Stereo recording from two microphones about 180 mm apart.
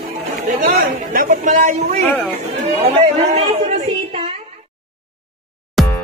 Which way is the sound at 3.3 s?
35° right (ahead or behind).